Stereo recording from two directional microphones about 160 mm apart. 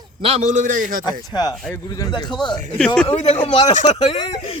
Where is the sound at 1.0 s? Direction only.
25° left (ahead or behind).